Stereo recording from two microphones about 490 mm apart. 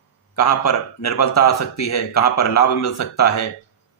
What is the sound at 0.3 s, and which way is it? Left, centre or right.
Speech, left.